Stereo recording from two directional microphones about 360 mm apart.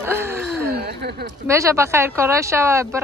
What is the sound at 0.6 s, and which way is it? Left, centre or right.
Speech, right.